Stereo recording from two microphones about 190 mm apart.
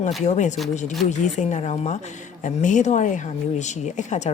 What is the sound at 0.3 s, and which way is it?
A woman's voice, 40° left (ahead or behind).